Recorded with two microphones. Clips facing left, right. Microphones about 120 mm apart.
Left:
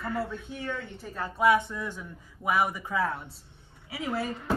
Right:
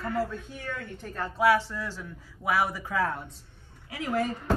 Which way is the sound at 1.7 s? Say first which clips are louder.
Even; 15° left (ahead or behind).